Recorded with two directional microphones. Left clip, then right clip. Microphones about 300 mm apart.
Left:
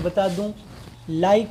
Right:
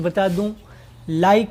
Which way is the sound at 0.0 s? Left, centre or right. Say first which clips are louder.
Right 2 dB; right.